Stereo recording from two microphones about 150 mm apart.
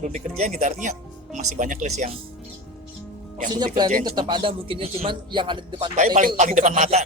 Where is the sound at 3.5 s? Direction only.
25° right (ahead or behind).